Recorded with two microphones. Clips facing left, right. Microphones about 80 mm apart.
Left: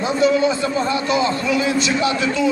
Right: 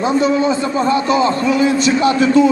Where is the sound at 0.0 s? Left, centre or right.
Right.